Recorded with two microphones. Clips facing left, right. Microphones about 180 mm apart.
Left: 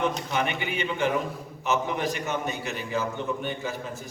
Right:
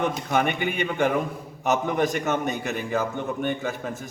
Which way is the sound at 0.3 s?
50° right (ahead or behind).